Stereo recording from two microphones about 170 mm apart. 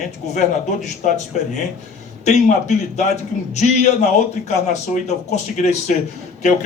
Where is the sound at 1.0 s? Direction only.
50° left (ahead or behind).